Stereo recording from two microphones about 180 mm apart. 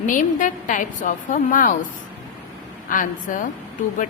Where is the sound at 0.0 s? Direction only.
45° left (ahead or behind).